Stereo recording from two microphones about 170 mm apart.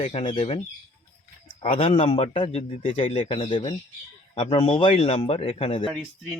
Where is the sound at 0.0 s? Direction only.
30° left (ahead or behind).